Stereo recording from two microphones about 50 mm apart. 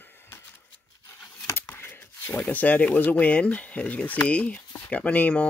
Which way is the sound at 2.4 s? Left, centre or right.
Left.